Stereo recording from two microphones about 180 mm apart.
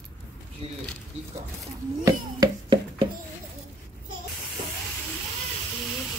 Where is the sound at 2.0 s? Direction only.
25° right (ahead or behind).